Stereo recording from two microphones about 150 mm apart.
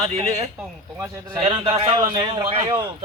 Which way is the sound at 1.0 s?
15° right (ahead or behind).